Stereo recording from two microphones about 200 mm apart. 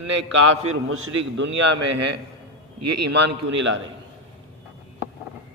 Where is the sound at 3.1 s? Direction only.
65° right (ahead or behind).